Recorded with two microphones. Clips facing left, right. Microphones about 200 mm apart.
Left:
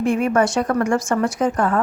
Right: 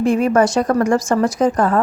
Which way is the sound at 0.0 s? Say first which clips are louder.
Right 3 dB; 35° right (ahead or behind).